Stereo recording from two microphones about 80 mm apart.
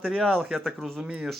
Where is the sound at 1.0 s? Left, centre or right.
Centre.